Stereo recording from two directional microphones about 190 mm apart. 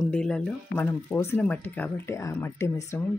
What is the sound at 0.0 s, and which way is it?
Speech, 5° left (ahead or behind).